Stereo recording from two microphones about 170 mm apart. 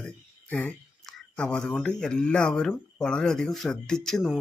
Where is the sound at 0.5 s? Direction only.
5° left (ahead or behind).